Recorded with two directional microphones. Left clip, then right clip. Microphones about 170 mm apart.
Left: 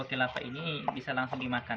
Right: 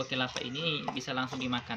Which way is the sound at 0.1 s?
15° left (ahead or behind).